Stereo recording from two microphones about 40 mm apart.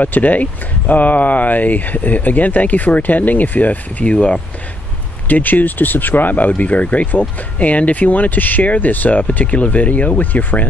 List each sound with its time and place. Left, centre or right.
0.0 s speech: left
4.0 s speech: left
5.3 s speech: left